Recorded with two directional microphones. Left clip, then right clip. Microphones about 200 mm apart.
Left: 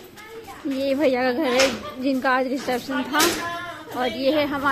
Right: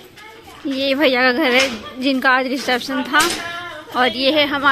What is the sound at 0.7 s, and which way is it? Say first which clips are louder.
Speech: right 5 dB; 5° right (ahead or behind).